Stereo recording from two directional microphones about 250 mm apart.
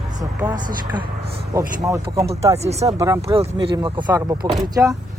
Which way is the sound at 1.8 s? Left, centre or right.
Centre.